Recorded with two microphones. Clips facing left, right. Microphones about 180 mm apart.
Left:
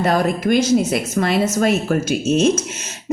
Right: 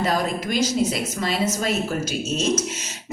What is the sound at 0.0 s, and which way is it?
A woman's voice, 55° left (ahead or behind).